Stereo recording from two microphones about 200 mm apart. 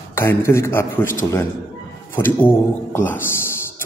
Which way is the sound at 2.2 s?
10° left (ahead or behind).